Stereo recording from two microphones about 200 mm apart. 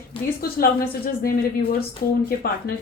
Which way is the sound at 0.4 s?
50° left (ahead or behind).